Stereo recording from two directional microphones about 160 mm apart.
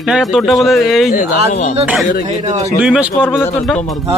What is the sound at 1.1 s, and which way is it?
Speech, 50° left (ahead or behind).